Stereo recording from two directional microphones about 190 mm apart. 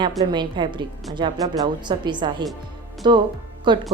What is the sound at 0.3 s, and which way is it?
A woman's voice, 25° right (ahead or behind).